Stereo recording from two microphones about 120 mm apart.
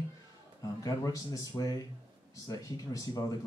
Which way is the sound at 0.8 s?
30° left (ahead or behind).